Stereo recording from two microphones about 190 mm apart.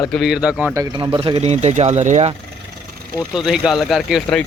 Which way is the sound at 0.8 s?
20° right (ahead or behind).